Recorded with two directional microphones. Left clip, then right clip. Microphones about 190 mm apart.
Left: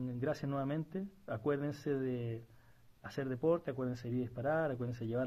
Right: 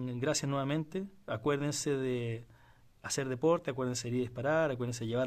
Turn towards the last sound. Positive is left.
turn(degrees=-30)  # may be behind; listen again after turning